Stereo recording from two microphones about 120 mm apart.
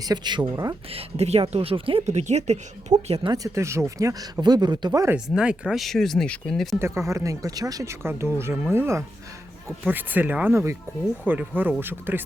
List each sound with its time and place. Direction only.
0.0 s speech: 35° right (ahead or behind)
0.5 s speech: 30° right (ahead or behind)
0.9 s speech: 55° right (ahead or behind)
2.0 s speech: 70° right (ahead or behind)
2.9 s speech: 30° right (ahead or behind)
5.1 s speech: 10° right (ahead or behind)
6.7 s speech: 25° right (ahead or behind)